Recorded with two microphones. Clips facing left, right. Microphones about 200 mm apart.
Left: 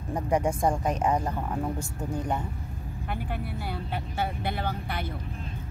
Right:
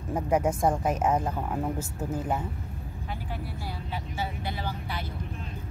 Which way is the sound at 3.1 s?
60° left (ahead or behind).